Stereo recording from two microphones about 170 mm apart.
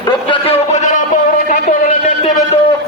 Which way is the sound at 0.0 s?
30° left (ahead or behind).